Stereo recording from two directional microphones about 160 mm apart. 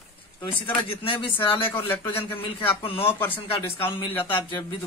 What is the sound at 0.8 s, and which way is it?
Speech, 35° left (ahead or behind).